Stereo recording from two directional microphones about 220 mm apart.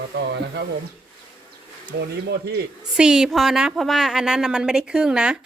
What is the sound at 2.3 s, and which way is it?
Speech, 50° right (ahead or behind).